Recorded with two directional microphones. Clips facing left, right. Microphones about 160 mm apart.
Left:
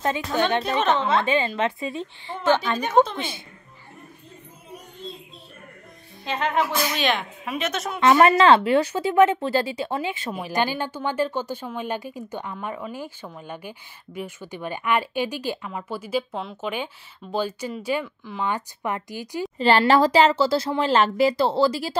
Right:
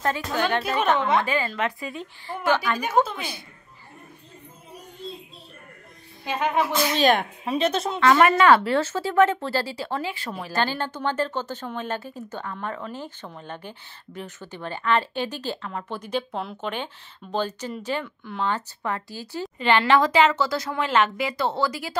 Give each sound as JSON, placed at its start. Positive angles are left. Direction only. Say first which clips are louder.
{"t": 0.0, "sound": "speech", "louder": "left 1 dB", "side_deg": 20}
{"t": 0.9, "sound": "a woman's voice", "louder": "even", "side_deg": -15}
{"t": 1.2, "sound": "speech", "louder": "left 3 dB", "side_deg": 20}
{"t": 2.8, "sound": "a woman's voice", "louder": "left 3 dB", "side_deg": -5}
{"t": 3.2, "sound": "speech", "louder": "left 3 dB", "side_deg": 25}
{"t": 6.2, "sound": "a woman's voice", "louder": "even", "side_deg": -10}
{"t": 7.0, "sound": "speech", "louder": "right 4 dB", "side_deg": -40}
{"t": 8.0, "sound": "speech", "louder": "left 2 dB", "side_deg": 25}
{"t": 18.4, "sound": "speech", "louder": "even", "side_deg": 15}
{"t": 19.6, "sound": "speech", "louder": "left 2 dB", "side_deg": 35}